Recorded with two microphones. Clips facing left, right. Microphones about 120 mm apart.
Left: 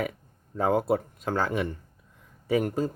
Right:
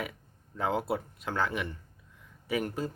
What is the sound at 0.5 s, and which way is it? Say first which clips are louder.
Speech: left 6 dB; 40° left (ahead or behind).